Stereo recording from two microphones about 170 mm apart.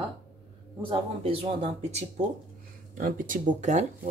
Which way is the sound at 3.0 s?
50° right (ahead or behind).